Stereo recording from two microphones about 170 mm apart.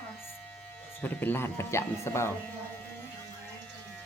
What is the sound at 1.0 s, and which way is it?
Speech, 10° left (ahead or behind).